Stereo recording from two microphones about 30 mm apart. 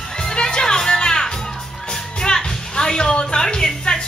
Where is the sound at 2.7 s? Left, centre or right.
Left.